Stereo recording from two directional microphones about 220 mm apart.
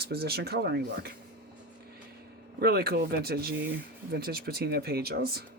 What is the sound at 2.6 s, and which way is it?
Speech, 45° right (ahead or behind).